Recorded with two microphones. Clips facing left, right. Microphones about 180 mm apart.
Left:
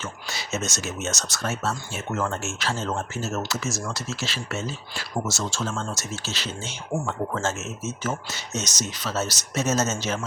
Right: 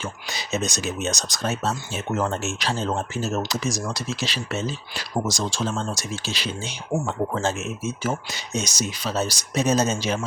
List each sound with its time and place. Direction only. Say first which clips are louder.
0.0 s speech: right 2 dB; 15° right (ahead or behind)